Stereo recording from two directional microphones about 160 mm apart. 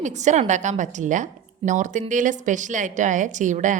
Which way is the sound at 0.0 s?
50° right (ahead or behind).